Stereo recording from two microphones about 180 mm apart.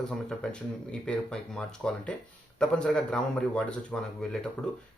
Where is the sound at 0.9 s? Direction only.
5° left (ahead or behind).